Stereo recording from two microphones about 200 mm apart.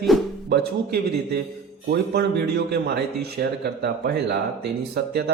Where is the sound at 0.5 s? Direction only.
55° right (ahead or behind).